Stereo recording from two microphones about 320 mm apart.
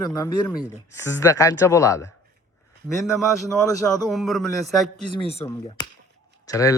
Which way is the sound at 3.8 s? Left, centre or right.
Centre.